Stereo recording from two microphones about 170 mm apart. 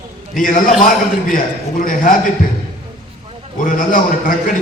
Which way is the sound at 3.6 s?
50° left (ahead or behind).